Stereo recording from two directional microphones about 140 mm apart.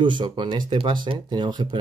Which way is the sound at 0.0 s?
35° right (ahead or behind).